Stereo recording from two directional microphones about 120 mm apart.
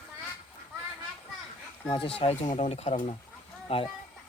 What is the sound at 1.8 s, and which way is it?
Speech, 50° left (ahead or behind).